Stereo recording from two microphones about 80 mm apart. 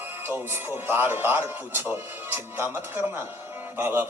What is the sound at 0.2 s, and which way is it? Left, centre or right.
Speech, right.